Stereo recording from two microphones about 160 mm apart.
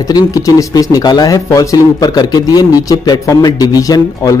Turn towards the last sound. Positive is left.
turn(degrees=25)  # may be behind; listen again after turning